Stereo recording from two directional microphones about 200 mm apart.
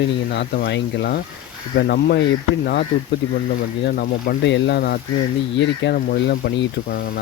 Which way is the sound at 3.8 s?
50° left (ahead or behind).